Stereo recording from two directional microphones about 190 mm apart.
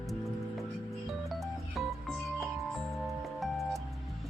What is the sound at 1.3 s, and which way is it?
Music, centre (ahead or behind).